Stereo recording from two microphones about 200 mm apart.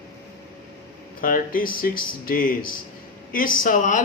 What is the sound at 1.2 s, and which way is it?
Speech, 45° left (ahead or behind).